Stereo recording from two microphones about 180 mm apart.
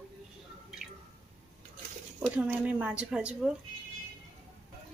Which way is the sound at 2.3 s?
5° right (ahead or behind).